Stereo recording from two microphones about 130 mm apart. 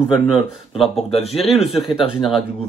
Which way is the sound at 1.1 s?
50° left (ahead or behind).